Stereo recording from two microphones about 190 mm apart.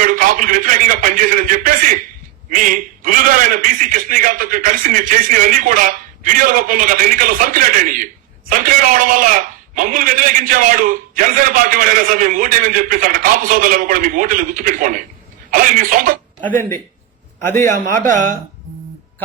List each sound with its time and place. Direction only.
0.0 s a sound: 45° right (ahead or behind)
2.5 s a man's voice: 45° right (ahead or behind)
17.4 s a man's voice: 15° left (ahead or behind)
18.1 s a man's voice: 45° right (ahead or behind)